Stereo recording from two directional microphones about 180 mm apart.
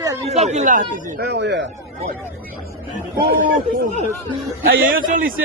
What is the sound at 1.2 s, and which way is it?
Speech, 70° right (ahead or behind).